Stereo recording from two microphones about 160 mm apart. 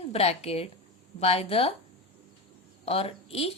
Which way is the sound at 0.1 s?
40° left (ahead or behind).